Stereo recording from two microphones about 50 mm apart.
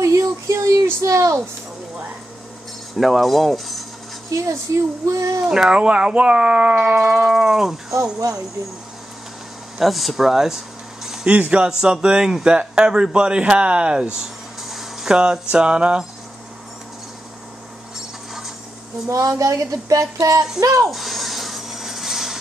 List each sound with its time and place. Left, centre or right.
0.0 s a sound: right
1.0 s speech: right
3.0 s speech: centre
4.3 s speech: right
5.7 s speech: centre
9.8 s speech: centre
11.2 s speech: right
11.6 s speech: centre
14.1 s a sound: centre
15.0 s speech: centre
19.0 s speech: right
20.6 s speech: centre
20.9 s a sound: centre